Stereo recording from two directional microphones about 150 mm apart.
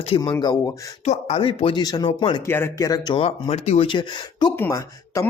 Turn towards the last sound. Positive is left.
turn(degrees=20)  # may be behind; listen again after turning